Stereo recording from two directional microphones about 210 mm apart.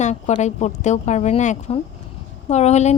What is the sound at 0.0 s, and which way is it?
Speech, 35° left (ahead or behind).